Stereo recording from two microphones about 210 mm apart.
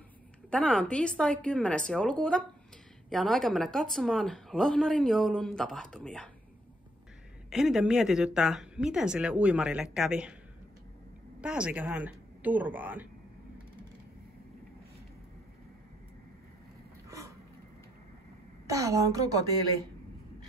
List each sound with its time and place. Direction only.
0.5 s a woman's voice: 5° left (ahead or behind)
7.4 s a woman's voice: centre (ahead or behind)
11.4 s speech: 5° right (ahead or behind)
18.7 s speech: 15° right (ahead or behind)